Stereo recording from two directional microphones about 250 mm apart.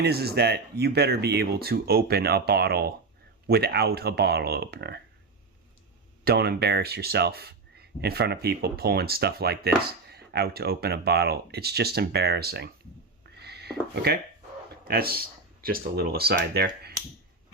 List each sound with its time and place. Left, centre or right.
0.0 s speech: right
6.2 s speech: right
13.3 s a sound: right
13.9 s speech: right